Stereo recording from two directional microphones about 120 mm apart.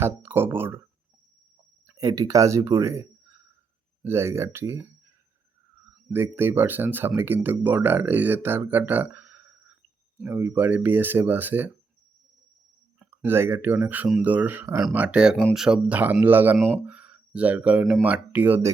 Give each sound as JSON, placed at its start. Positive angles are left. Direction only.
{"t": 0.0, "sound": "speech", "side_deg": -15}
{"t": 2.0, "sound": "speech", "side_deg": -30}
{"t": 6.1, "sound": "speech", "side_deg": -20}
{"t": 13.1, "sound": "speech", "side_deg": -20}